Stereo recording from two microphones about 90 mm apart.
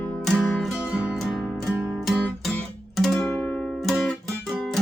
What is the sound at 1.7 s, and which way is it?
Music, 15° right (ahead or behind).